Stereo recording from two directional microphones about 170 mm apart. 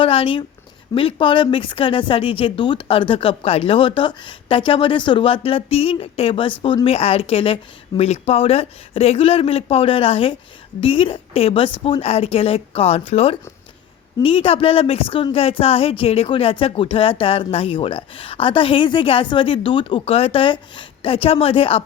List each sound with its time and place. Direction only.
0.0 s a woman's voice: 30° left (ahead or behind)